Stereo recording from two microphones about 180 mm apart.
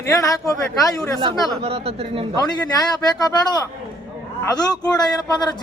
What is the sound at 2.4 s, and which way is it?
A man's voice, 20° left (ahead or behind).